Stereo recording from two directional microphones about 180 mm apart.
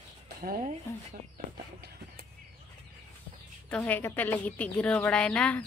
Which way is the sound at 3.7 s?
10° left (ahead or behind).